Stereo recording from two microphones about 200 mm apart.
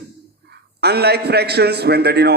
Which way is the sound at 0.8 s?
55° right (ahead or behind).